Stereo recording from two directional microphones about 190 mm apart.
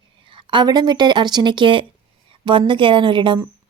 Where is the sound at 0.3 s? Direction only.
25° right (ahead or behind).